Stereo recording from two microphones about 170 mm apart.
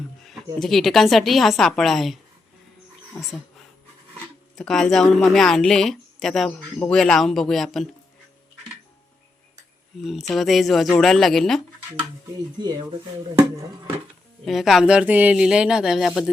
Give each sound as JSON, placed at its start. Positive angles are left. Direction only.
{"t": 0.3, "sound": "a woman's voice", "side_deg": 0}
{"t": 4.5, "sound": "a woman's voice", "side_deg": 5}
{"t": 10.0, "sound": "a woman's voice", "side_deg": 0}
{"t": 12.5, "sound": "speech", "side_deg": -25}
{"t": 14.4, "sound": "a woman's voice", "side_deg": 0}